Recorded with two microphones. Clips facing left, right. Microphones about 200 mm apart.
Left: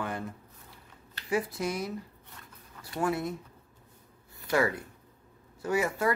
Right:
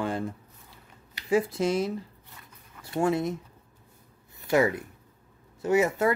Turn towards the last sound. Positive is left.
turn(degrees=-25)  # may be behind; listen again after turning